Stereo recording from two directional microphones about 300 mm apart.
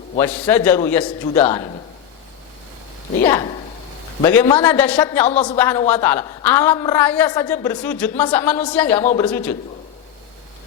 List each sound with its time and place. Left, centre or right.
0.2 s a woman's voice: centre
1.5 s speech: centre
4.2 s a woman's voice: centre
5.3 s speech: left
5.5 s a woman's voice: centre